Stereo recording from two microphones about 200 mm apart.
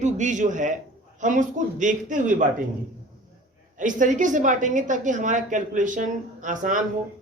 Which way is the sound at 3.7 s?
40° right (ahead or behind).